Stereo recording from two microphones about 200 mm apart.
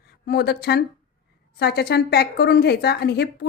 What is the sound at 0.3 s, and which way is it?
A woman's voice, 55° left (ahead or behind).